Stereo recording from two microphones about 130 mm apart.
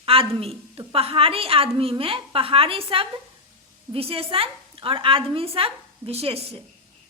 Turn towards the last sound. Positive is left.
turn(degrees=-50)  # may be behind; listen again after turning